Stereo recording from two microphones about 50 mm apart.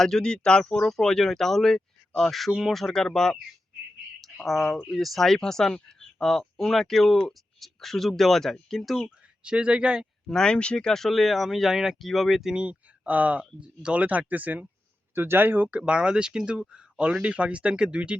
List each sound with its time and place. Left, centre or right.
0.0 s speech: centre
4.4 s speech: centre
9.0 s speech: centre
10.2 s speech: centre
10.5 s speech: left; by 12.5 s centre
12.5 s speech: right
15.1 s speech: right
15.9 s speech: centre